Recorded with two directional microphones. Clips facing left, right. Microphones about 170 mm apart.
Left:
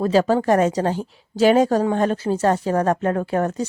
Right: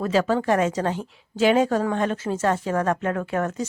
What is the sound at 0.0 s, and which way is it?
Speech, 35° left (ahead or behind).